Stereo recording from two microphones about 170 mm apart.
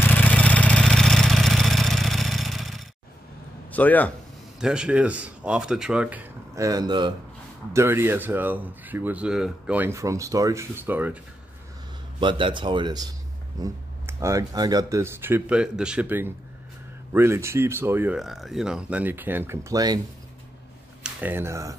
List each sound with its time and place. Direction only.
0.0 s vehicle: 10° left (ahead or behind)
3.7 s speech: 10° left (ahead or behind)
4.6 s speech: 5° right (ahead or behind); by 7.2 s 25° right (ahead or behind)
7.7 s speech: 15° right (ahead or behind)
12.2 s speech: 30° right (ahead or behind)
21.0 s speech: 10° right (ahead or behind)